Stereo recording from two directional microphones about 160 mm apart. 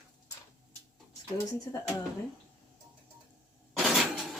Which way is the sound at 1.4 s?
20° left (ahead or behind).